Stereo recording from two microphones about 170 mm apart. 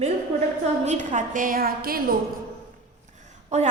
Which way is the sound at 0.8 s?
50° right (ahead or behind).